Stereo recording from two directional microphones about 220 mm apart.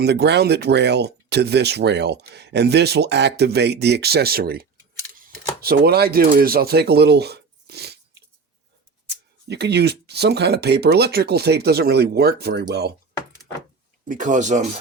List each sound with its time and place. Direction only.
0.0 s speech: 50° right (ahead or behind)
9.5 s speech: 50° right (ahead or behind)
14.0 s speech: 35° right (ahead or behind)